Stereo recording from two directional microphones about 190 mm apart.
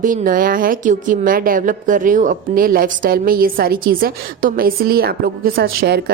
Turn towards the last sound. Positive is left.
turn(degrees=-55)  # may be behind; listen again after turning